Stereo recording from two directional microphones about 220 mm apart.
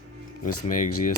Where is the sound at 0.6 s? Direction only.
35° left (ahead or behind).